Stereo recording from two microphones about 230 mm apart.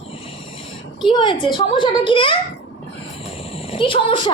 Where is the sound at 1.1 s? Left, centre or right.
Left.